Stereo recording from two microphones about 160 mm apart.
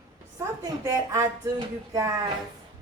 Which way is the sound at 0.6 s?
20° right (ahead or behind).